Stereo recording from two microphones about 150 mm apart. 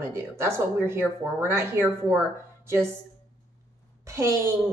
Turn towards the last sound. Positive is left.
turn(degrees=-20)  # may be behind; listen again after turning